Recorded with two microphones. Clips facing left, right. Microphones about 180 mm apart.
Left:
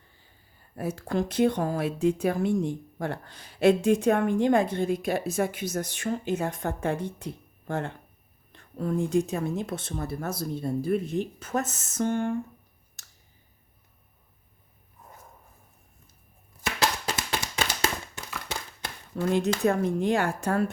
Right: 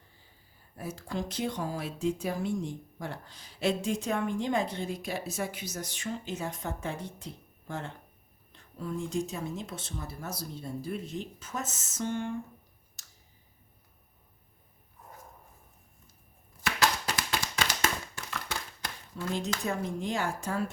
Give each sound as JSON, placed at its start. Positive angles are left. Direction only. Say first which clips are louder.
{"t": 0.8, "sound": "speech", "louder": "left 7 dB", "side_deg": 60}
{"t": 13.0, "sound": "clicking", "louder": "left 3 dB", "side_deg": 60}
{"t": 16.6, "sound": "a sound", "louder": "left 1 dB", "side_deg": 25}
{"t": 17.8, "sound": "tap", "louder": "left 2 dB", "side_deg": 25}
{"t": 19.1, "sound": "speech", "louder": "left 9 dB", "side_deg": 60}